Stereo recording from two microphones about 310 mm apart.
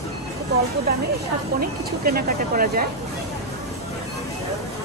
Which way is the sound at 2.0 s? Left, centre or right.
Right.